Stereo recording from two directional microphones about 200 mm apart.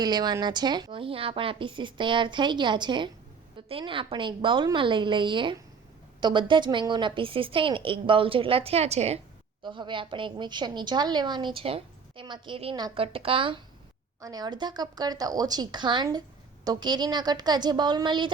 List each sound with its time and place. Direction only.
0.0 s a woman's voice: 20° right (ahead or behind)